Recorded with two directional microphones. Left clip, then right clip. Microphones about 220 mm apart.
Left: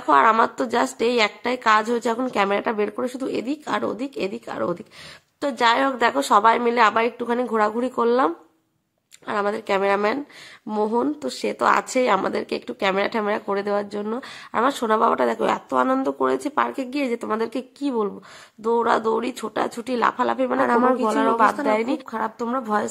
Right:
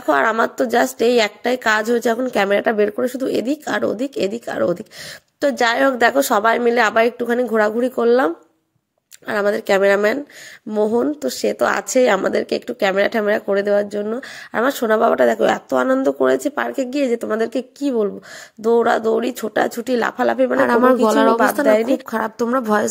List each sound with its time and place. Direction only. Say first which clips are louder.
0.0 s a woman's voice: even; 10° right (ahead or behind)
20.6 s a woman's voice: right 5 dB; 20° right (ahead or behind)